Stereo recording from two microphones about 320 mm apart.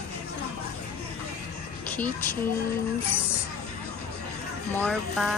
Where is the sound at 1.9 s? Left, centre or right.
Centre.